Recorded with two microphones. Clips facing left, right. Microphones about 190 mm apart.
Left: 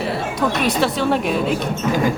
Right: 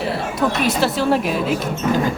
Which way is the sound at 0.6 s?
Centre (ahead or behind).